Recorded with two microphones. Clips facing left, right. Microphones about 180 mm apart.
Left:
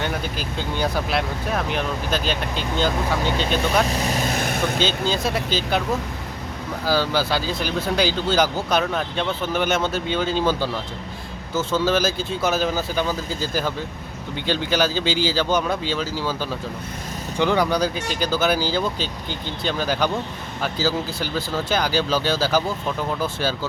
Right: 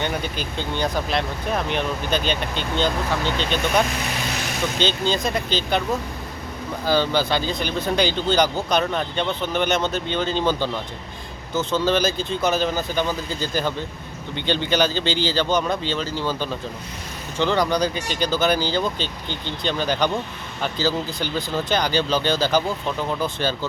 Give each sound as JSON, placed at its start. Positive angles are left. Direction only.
{"t": 0.0, "sound": "speech", "side_deg": 5}
{"t": 3.8, "sound": "vehicle", "side_deg": 40}
{"t": 4.8, "sound": "speech", "side_deg": 5}
{"t": 6.8, "sound": "speech", "side_deg": 5}
{"t": 11.5, "sound": "speech", "side_deg": 5}